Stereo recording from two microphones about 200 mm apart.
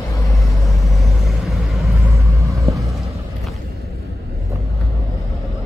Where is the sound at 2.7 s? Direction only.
30° right (ahead or behind).